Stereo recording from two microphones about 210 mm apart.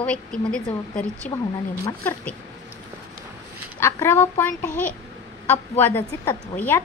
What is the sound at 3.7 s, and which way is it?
Speech, 10° left (ahead or behind).